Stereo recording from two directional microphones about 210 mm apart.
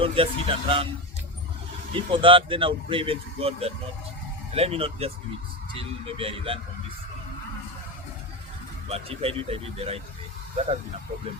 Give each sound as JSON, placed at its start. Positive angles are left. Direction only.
{"t": 0.0, "sound": "speech", "side_deg": -25}
{"t": 1.9, "sound": "speech", "side_deg": -25}
{"t": 8.9, "sound": "speech", "side_deg": -30}